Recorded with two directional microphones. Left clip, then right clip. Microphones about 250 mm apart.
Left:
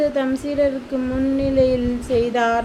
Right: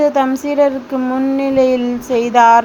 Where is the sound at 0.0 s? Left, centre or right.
Centre.